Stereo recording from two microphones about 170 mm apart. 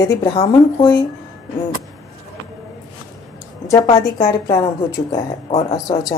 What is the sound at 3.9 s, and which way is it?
Speech, 25° left (ahead or behind).